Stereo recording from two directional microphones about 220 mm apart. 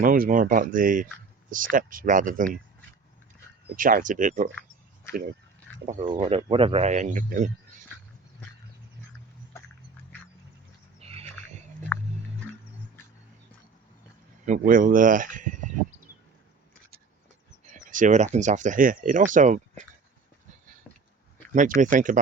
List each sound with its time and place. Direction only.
0.0 s speech: 40° right (ahead or behind)
3.8 s speech: 40° right (ahead or behind)
5.8 s speech: 25° right (ahead or behind)
11.0 s a sound: 25° right (ahead or behind)
11.9 s music: 10° left (ahead or behind)
14.4 s speech: 35° right (ahead or behind)
17.7 s speech: 35° right (ahead or behind)
21.5 s speech: 35° right (ahead or behind)